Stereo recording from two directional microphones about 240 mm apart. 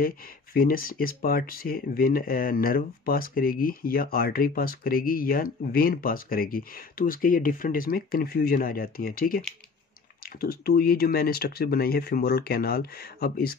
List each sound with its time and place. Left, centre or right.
0.0 s speech: left
10.4 s speech: left